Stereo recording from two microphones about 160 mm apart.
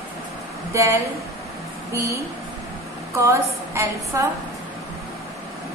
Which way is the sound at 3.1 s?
15° right (ahead or behind).